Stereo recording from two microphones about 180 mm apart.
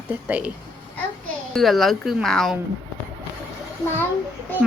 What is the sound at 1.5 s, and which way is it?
A woman's voice, centre (ahead or behind).